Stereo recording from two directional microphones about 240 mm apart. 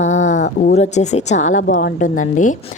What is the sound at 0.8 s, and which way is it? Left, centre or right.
A woman's voice, left.